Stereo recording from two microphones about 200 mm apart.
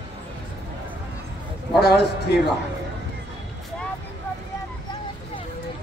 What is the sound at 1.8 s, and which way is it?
Speech, 55° left (ahead or behind).